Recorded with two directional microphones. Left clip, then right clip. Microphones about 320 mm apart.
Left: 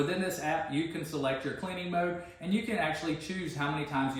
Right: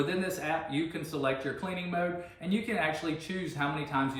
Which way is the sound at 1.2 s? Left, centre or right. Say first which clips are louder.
Right 2 dB; centre.